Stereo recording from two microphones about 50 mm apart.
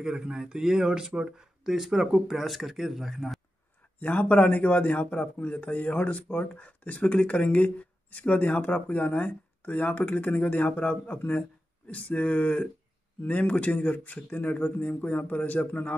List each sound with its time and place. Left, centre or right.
0.0 s speech: centre
4.0 s speech: left